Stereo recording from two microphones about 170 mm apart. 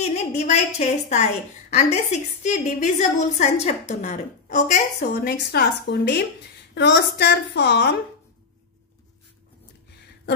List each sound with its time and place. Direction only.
0.0 s a woman's voice: 40° left (ahead or behind)
5.1 s a woman's voice: 65° left (ahead or behind)
6.7 s a woman's voice: 80° left